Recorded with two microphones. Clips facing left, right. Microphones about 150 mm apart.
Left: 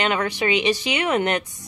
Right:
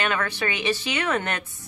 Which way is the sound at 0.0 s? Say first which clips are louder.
Left 4 dB; 20° left (ahead or behind).